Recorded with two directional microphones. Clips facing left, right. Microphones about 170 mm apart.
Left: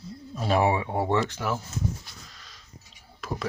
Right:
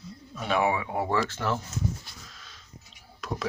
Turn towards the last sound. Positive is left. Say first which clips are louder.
# left 1 dB
turn(degrees=0)  # may be behind; listen again after turning